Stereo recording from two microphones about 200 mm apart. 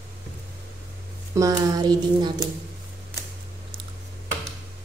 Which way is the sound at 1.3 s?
15° right (ahead or behind).